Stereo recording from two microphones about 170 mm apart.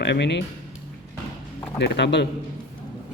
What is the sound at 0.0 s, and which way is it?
Speech, 90° left.